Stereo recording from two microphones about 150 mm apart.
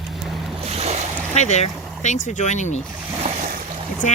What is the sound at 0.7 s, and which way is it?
Boat, 45° right (ahead or behind).